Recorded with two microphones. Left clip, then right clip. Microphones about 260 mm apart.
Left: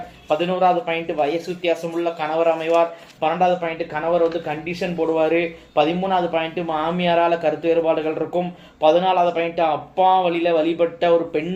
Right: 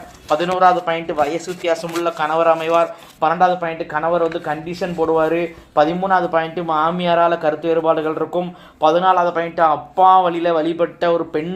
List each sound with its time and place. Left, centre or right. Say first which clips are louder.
0.3 s speech: right 4 dB; right
10.0 s speech: right 5 dB; right
10.2 s speech: right 1 dB; right